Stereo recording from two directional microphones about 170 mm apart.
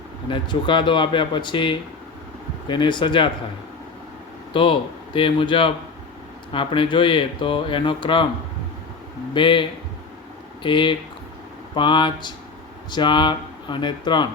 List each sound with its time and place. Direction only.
0.3 s speech: 30° left (ahead or behind)
4.5 s speech: 30° left (ahead or behind)
9.3 s speech: 30° left (ahead or behind)